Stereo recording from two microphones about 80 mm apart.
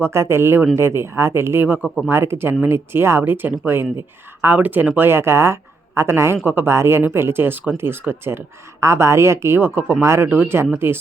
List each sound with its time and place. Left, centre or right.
0.0 s speech: right